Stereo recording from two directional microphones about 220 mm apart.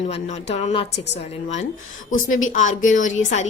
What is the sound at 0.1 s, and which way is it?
A woman's voice, 30° left (ahead or behind).